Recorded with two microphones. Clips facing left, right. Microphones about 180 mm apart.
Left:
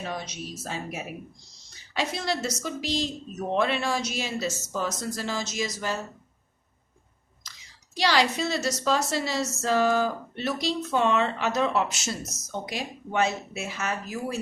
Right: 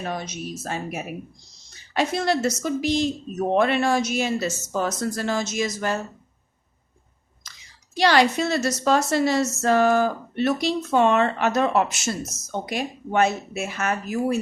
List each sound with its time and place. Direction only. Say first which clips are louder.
0.1 s a woman's voice: right 4 dB; 50° right (ahead or behind)
7.9 s a woman's voice: right 5 dB; 55° right (ahead or behind)